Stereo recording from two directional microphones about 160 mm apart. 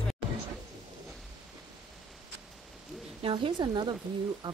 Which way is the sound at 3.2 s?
30° right (ahead or behind).